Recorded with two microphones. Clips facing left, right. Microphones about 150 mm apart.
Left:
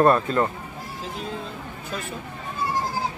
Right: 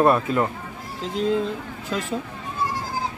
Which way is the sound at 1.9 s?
90° right.